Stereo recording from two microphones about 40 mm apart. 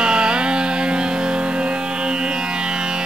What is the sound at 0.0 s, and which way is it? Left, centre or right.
Music, right.